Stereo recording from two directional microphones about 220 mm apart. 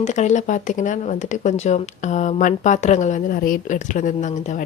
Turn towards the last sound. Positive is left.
turn(degrees=35)  # may be behind; listen again after turning